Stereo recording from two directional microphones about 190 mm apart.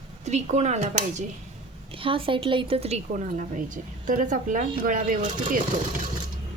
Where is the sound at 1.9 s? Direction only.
30° right (ahead or behind); by 5.6 s 45° right (ahead or behind).